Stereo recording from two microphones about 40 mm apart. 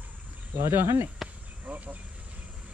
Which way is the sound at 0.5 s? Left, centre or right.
Right.